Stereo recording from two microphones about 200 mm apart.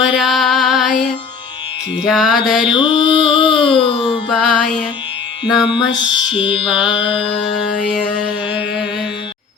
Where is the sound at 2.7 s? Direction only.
25° left (ahead or behind).